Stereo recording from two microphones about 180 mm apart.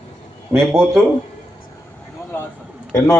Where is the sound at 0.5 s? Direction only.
Centre (ahead or behind).